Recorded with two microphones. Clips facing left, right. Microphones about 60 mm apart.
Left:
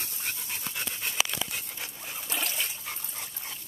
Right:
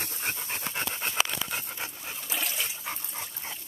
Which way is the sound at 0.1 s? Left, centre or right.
Right.